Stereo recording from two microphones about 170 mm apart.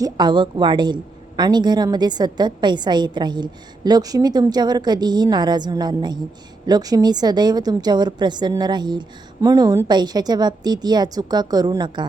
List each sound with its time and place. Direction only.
0.0 s a woman's voice: 25° right (ahead or behind)